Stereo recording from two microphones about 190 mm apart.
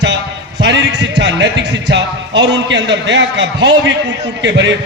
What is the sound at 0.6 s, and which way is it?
A man's voice, 65° right (ahead or behind).